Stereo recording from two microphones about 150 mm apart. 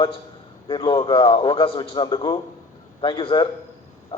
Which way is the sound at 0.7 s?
30° left (ahead or behind).